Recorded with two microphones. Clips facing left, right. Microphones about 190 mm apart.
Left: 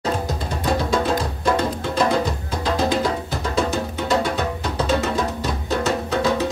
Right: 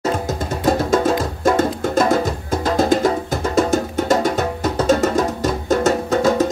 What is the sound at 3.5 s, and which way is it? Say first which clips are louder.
Music: right 6 dB; 45° right (ahead or behind).